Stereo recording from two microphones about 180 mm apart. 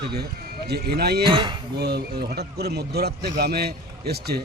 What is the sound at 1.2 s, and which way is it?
Speech, 25° right (ahead or behind).